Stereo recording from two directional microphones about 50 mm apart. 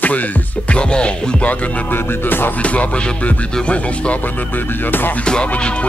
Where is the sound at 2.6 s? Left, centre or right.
Left.